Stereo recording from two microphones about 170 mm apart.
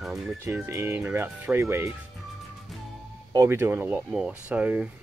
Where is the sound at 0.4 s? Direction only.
15° right (ahead or behind).